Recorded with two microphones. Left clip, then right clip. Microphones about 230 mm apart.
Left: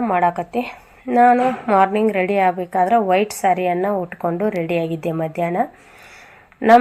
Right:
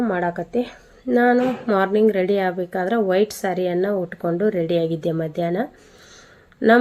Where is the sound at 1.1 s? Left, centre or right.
Left.